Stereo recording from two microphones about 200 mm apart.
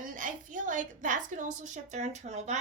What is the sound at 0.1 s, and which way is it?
A woman's voice, 40° right (ahead or behind).